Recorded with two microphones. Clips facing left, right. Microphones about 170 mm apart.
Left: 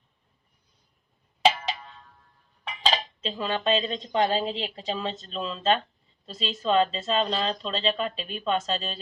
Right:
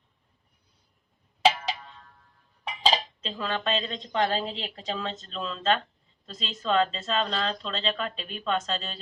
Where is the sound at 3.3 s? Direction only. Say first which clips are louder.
Left 3 dB; 15° left (ahead or behind).